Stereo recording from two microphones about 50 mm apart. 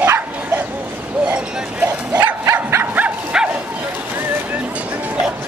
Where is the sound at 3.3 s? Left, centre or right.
Centre.